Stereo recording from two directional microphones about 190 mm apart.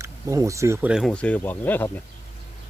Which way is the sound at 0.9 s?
Centre (ahead or behind).